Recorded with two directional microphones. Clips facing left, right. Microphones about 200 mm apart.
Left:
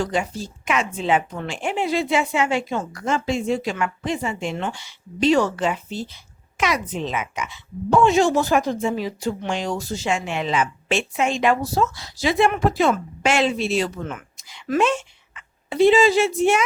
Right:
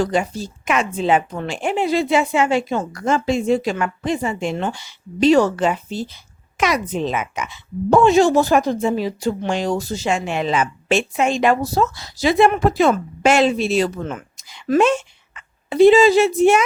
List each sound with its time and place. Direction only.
0.0 s speech: 40° right (ahead or behind)